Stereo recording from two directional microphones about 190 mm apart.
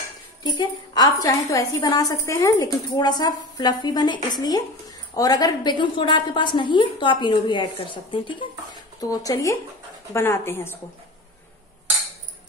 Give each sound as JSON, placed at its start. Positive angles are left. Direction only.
{"t": 0.4, "sound": "a woman's voice", "side_deg": 25}